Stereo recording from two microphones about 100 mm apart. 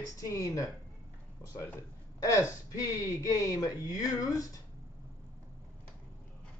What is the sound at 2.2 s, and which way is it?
A man's voice, 35° left (ahead or behind).